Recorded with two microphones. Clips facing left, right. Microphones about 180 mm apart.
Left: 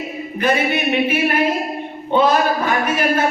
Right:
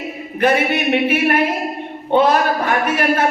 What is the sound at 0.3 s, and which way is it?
Speech, 60° right (ahead or behind).